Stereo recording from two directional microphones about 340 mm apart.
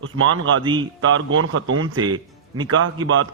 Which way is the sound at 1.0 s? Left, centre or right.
Right.